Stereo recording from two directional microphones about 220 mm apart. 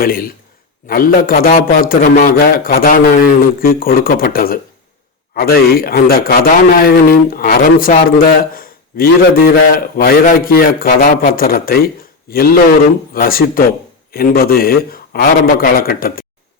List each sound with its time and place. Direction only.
0.0 s a man's voice: 40° left (ahead or behind)